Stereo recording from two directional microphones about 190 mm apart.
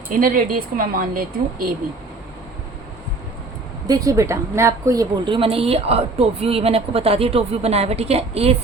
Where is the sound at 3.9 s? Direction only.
20° right (ahead or behind).